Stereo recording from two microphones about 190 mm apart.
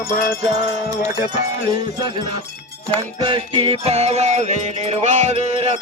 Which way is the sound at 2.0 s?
25° right (ahead or behind).